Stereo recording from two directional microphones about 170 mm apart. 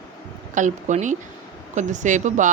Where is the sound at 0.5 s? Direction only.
45° right (ahead or behind).